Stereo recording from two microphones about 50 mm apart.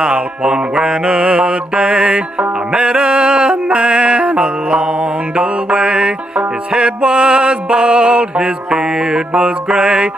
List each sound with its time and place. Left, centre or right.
0.0 s music: centre